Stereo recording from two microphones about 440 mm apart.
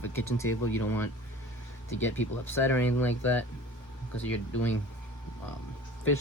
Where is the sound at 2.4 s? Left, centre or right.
Centre.